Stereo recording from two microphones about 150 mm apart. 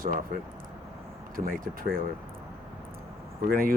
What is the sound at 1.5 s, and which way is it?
Speech, 70° right (ahead or behind).